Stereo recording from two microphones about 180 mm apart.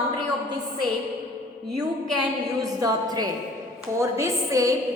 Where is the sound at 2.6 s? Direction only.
20° right (ahead or behind).